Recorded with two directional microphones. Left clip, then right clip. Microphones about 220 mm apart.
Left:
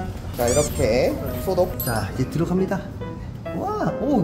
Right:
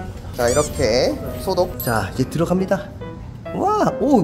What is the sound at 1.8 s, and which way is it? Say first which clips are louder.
Speech: right 5 dB; 30° right (ahead or behind).